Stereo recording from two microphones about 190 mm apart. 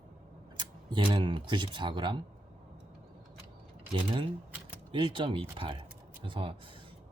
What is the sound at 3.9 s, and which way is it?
Speech, 30° right (ahead or behind).